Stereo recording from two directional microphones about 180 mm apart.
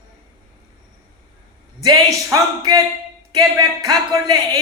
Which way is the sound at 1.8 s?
20° right (ahead or behind).